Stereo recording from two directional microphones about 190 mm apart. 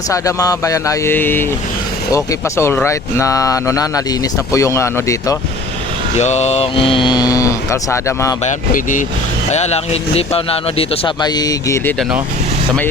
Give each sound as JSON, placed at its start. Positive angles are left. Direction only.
{"t": 0.1, "sound": "speech", "side_deg": 15}
{"t": 6.1, "sound": "speech", "side_deg": 35}
{"t": 8.4, "sound": "speech", "side_deg": 45}